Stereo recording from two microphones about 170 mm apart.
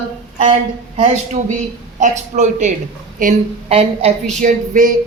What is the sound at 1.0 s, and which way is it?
A woman's voice, 45° right (ahead or behind).